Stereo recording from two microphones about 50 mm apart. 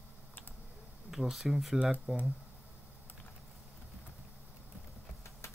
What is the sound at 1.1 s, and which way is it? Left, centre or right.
Speech, centre.